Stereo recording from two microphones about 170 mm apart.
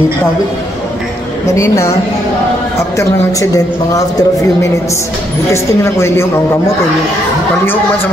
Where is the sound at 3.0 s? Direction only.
20° left (ahead or behind).